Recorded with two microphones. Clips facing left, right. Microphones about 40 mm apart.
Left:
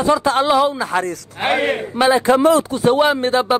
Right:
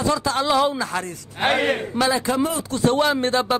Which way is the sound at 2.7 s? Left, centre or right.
Centre.